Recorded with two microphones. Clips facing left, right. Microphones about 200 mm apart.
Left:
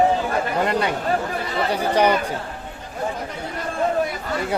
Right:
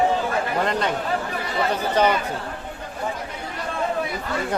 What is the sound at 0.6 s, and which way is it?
Speech, 10° left (ahead or behind).